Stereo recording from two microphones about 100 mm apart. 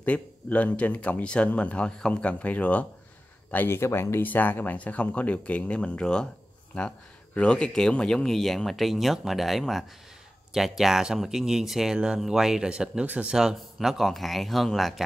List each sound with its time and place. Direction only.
0.0 s speech: 15° left (ahead or behind)